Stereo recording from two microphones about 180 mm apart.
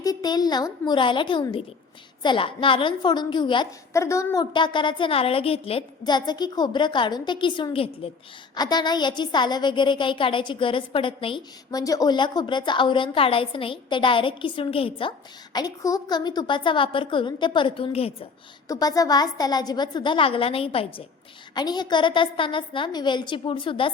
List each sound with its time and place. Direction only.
0.0 s a woman's voice: 20° left (ahead or behind)
15.5 s a woman's voice: 20° left (ahead or behind)
18.7 s a woman's voice: 20° left (ahead or behind)